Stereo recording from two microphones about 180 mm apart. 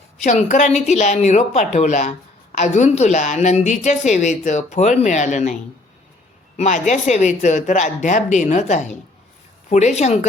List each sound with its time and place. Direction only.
0.2 s speech: 40° left (ahead or behind)
6.6 s speech: 40° left (ahead or behind)